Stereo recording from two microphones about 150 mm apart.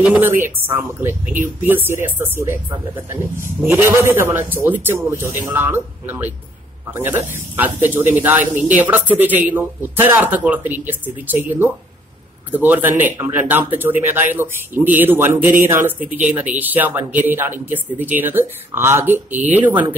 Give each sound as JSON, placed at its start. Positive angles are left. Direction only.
{"t": 0.0, "sound": "speech", "side_deg": -10}